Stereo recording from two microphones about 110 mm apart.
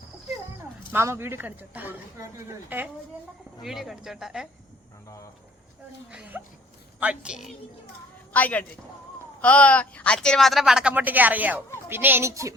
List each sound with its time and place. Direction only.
0.9 s speech: 25° right (ahead or behind)
3.6 s speech: centre (ahead or behind)
5.0 s a sound: 30° left (ahead or behind)
6.1 s speech: 15° right (ahead or behind)
8.3 s a woman's voice: 15° left (ahead or behind); by 10.9 s 5° right (ahead or behind)
10.9 s speech: 15° right (ahead or behind)